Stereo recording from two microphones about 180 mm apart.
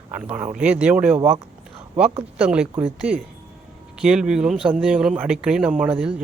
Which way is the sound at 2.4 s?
5° right (ahead or behind).